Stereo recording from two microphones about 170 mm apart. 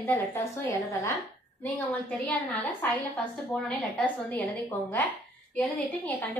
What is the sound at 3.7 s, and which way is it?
Speech, 10° left (ahead or behind).